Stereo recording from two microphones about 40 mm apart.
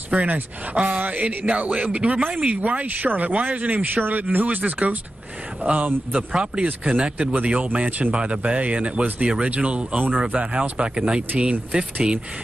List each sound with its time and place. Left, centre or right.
0.1 s speech: right
3.1 s speech: right
6.1 s speech: right